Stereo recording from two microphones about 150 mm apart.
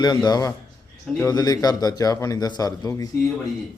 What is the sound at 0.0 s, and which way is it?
A man's voice, 30° left (ahead or behind).